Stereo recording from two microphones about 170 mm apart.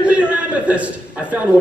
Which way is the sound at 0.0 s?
5° right (ahead or behind).